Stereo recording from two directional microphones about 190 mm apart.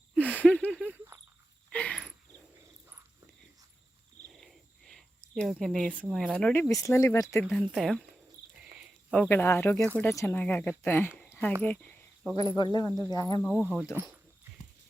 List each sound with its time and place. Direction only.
0.1 s a sound: 5° left (ahead or behind)
0.8 s cricket: 10° right (ahead or behind)
1.7 s cricket: 5° left (ahead or behind)
4.4 s a sound: centre (ahead or behind)
5.3 s speech: centre (ahead or behind)
7.4 s speech: centre (ahead or behind)
9.3 s speech: 10° left (ahead or behind)
11.2 s a sound: 10° left (ahead or behind)
11.6 s cricket: 10° left (ahead or behind)
12.5 s speech: 20° left (ahead or behind)